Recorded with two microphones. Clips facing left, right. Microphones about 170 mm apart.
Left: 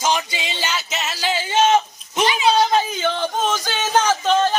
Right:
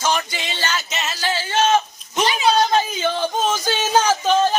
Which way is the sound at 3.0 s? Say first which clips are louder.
Right 1 dB; 10° right (ahead or behind).